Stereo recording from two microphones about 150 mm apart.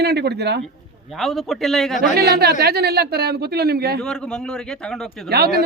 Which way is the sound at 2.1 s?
90° right.